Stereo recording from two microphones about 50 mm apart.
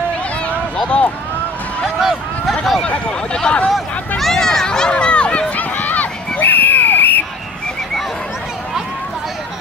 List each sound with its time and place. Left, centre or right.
0.8 s speech: left
2.0 s speech: centre
3.1 s speech: centre
4.2 s a sound: centre; by 7.2 s left